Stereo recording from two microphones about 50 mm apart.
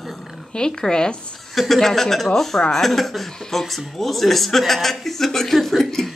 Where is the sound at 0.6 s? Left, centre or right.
Centre.